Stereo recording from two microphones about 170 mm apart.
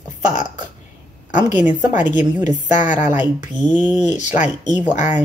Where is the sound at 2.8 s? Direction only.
45° left (ahead or behind).